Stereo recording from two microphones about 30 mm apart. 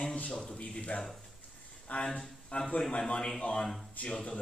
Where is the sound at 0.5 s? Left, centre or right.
Left.